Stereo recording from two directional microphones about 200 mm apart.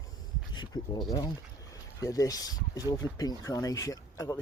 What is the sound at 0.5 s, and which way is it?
Speech, 20° left (ahead or behind).